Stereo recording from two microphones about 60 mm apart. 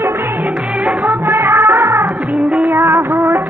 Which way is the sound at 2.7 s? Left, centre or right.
Right.